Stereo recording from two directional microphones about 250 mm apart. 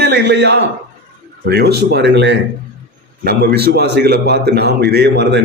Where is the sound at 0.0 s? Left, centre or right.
Right.